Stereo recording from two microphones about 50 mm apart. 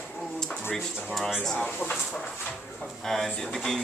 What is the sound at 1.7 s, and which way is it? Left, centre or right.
Speech, left.